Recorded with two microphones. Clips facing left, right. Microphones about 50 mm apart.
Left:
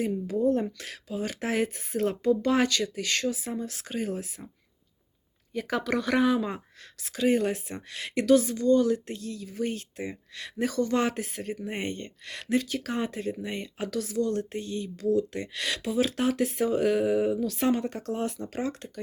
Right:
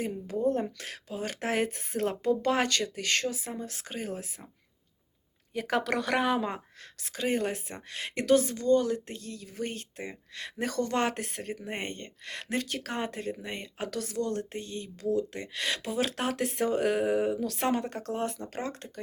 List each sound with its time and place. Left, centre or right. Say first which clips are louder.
0.0 s speech: left 3 dB; right
5.5 s speech: even; right
10.7 s speech: left 2 dB; right
12.5 s speech: left 5 dB; right
15.9 s speech: left 6 dB; right
17.8 s speech: left 2 dB; right